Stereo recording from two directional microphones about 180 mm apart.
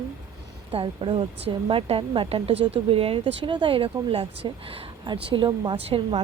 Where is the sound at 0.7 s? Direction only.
30° right (ahead or behind).